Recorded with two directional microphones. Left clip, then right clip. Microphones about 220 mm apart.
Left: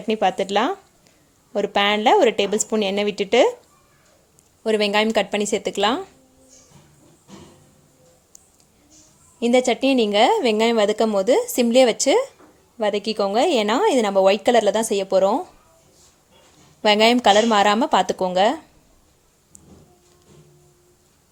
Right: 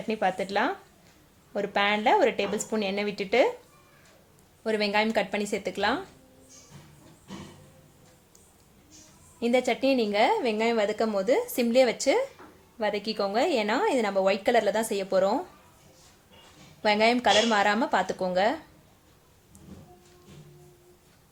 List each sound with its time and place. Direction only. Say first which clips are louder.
0.1 s a woman's voice: left 8 dB; 35° left (ahead or behind)
4.6 s a woman's voice: left 7 dB; 35° left (ahead or behind)
9.4 s a woman's voice: left 7 dB; 35° left (ahead or behind)
16.8 s a woman's voice: left 7 dB; 35° left (ahead or behind)